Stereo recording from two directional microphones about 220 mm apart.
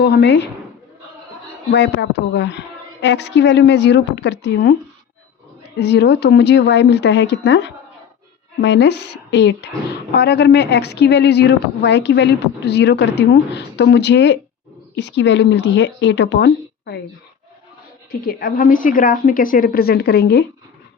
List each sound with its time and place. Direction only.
0.0 s a woman's voice: 50° left (ahead or behind)
1.7 s a woman's voice: 50° left (ahead or behind)
5.8 s a woman's voice: 50° left (ahead or behind)
18.1 s a woman's voice: 45° left (ahead or behind)